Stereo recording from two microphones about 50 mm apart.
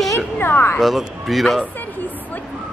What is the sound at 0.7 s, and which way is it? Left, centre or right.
Speech, centre.